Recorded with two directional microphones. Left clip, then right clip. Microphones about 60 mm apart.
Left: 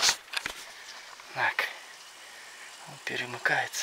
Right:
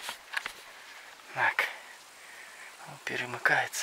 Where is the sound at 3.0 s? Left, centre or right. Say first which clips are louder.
Right 1 dB; right.